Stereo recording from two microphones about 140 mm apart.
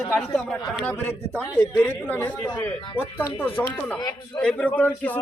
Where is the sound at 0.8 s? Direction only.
15° left (ahead or behind).